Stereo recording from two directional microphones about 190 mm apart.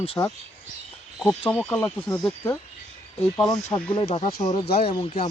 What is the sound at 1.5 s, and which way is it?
Speech, 10° left (ahead or behind).